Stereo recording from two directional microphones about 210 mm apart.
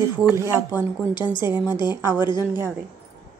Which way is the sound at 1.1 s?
20° left (ahead or behind).